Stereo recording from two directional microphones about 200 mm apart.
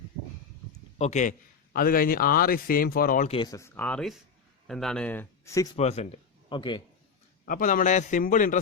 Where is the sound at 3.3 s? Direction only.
20° left (ahead or behind).